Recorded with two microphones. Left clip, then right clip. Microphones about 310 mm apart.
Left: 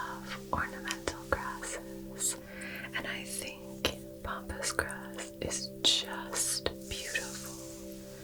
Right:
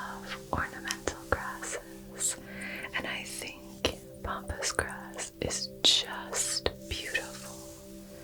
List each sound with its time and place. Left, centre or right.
0.3 s music: right